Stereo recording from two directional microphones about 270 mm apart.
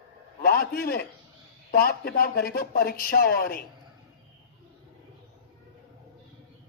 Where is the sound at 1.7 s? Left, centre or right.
Left.